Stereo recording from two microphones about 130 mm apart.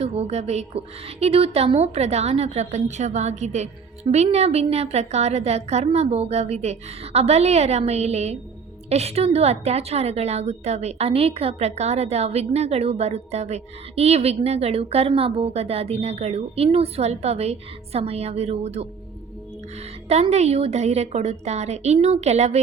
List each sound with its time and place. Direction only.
0.0 s a woman's voice: 50° right (ahead or behind)
20.1 s a woman's voice: 55° right (ahead or behind)